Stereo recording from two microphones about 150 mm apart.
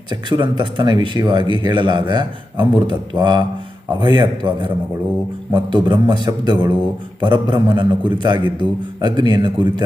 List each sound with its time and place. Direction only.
0.1 s a man's voice: 30° right (ahead or behind)